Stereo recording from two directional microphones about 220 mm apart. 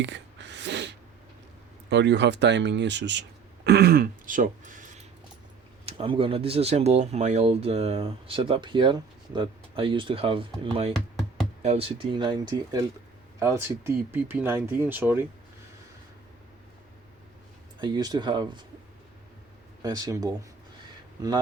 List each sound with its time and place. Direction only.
0.0 s a sound: 55° right (ahead or behind)
1.9 s speech: 50° right (ahead or behind); by 5.0 s 35° right (ahead or behind)
5.8 s speech: 25° right (ahead or behind)
10.9 s knock: centre (ahead or behind)
11.6 s speech: 25° right (ahead or behind); by 15.3 s 10° right (ahead or behind)
17.7 s speech: 20° right (ahead or behind)
19.8 s speech: 15° right (ahead or behind)